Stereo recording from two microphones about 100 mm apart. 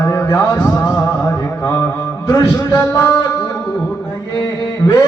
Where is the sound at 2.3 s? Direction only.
30° left (ahead or behind).